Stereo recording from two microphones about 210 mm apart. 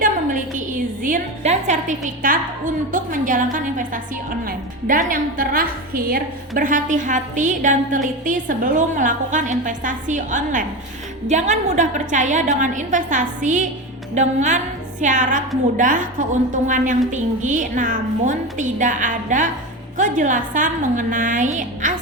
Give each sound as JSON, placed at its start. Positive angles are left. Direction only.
{"t": 0.0, "sound": "a woman's voice", "side_deg": -40}